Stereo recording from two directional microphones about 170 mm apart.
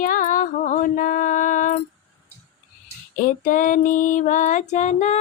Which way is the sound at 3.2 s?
50° left (ahead or behind).